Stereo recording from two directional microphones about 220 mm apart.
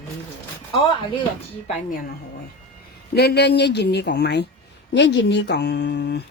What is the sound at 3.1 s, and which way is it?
A woman's voice, 50° left (ahead or behind).